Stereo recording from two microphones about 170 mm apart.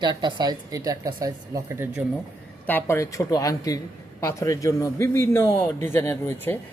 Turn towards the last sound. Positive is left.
turn(degrees=15)  # may be behind; listen again after turning